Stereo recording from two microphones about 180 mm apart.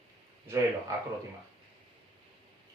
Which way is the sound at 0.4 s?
15° right (ahead or behind).